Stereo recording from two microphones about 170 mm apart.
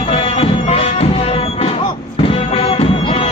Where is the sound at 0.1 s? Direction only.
35° left (ahead or behind).